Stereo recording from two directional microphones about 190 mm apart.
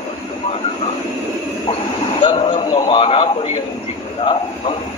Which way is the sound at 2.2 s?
30° left (ahead or behind).